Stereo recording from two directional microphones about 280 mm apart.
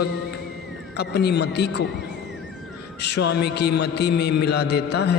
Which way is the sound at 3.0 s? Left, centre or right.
Left.